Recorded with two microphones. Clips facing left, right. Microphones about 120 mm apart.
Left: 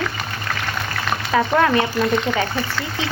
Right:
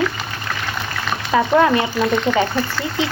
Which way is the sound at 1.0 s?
Centre (ahead or behind).